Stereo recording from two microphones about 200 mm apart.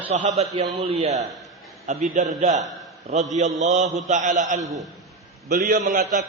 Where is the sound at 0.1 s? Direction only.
30° right (ahead or behind).